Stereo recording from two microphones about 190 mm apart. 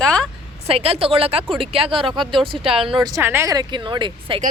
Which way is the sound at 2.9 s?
20° right (ahead or behind).